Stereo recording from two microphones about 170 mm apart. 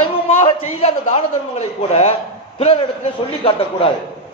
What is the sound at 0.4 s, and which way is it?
A man's voice, 40° left (ahead or behind).